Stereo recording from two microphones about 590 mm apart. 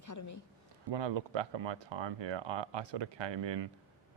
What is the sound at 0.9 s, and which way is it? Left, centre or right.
Speech, right.